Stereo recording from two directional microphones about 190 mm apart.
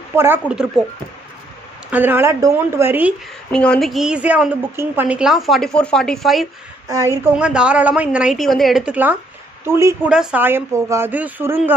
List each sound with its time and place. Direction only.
0.1 s speech: 10° right (ahead or behind)
1.9 s speech: 10° right (ahead or behind)
3.5 s a woman's voice: 5° left (ahead or behind)
6.9 s a woman's voice: 15° right (ahead or behind)